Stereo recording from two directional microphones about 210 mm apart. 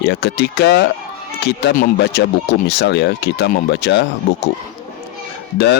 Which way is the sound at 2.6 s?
50° left (ahead or behind).